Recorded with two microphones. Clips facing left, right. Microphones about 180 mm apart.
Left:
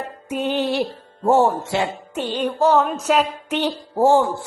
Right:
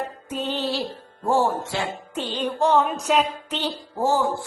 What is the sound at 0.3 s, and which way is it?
Music, 10° left (ahead or behind).